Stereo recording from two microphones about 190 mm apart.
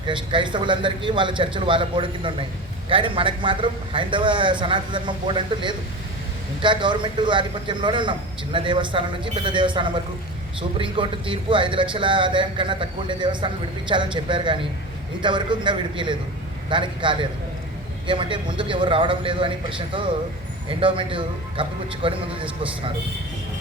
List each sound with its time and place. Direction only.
0.1 s a man's voice: 25° right (ahead or behind)